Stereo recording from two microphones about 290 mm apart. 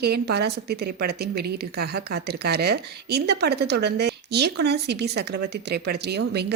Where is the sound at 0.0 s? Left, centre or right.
Right.